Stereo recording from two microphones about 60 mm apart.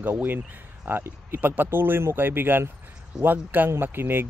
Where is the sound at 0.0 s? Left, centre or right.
Right.